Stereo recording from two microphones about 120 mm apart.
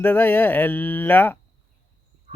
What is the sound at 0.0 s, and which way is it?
A man's voice, 15° left (ahead or behind).